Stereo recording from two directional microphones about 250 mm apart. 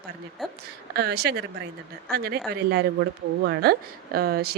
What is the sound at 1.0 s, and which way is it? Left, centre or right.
A woman's voice, right.